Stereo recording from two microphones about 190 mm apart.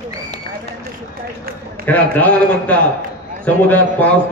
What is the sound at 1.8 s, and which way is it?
A man's voice, 10° left (ahead or behind).